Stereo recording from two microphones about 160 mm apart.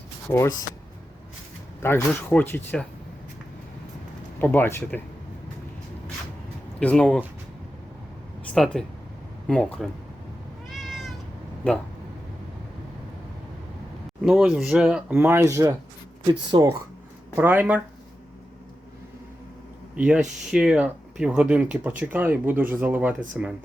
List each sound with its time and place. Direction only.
0.3 s speech: 20° left (ahead or behind)
1.8 s speech: 15° left (ahead or behind)
4.4 s speech: 10° left (ahead or behind)
6.7 s speech: 5° left (ahead or behind)
8.5 s speech: centre (ahead or behind)
10.7 s cat: centre (ahead or behind)
14.3 s speech: 5° right (ahead or behind)
15.2 s speech: 15° right (ahead or behind)
17.3 s speech: 10° right (ahead or behind)
20.0 s speech: 5° right (ahead or behind)